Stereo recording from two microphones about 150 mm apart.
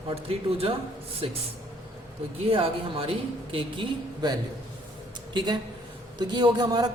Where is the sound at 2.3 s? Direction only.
40° right (ahead or behind).